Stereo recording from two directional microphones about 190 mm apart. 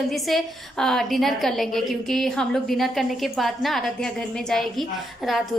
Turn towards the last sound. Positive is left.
turn(degrees=0)  # may be behind; listen again after turning